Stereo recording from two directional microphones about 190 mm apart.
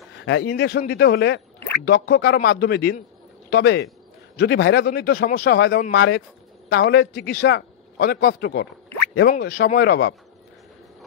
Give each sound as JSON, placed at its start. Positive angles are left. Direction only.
{"t": 0.2, "sound": "a man's voice", "side_deg": 70}